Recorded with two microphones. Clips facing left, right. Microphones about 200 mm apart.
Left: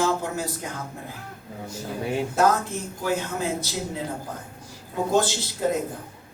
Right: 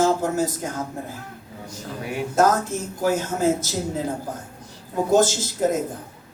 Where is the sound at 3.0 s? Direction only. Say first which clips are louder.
Right 6 dB; 45° right (ahead or behind).